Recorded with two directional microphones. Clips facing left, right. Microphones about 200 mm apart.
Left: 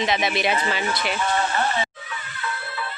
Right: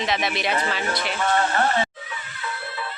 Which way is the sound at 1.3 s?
50° right (ahead or behind).